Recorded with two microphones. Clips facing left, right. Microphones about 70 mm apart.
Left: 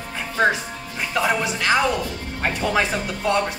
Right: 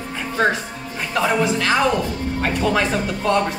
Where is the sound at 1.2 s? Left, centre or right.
Centre.